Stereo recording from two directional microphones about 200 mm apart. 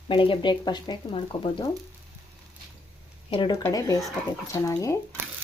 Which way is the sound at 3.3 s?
25° left (ahead or behind).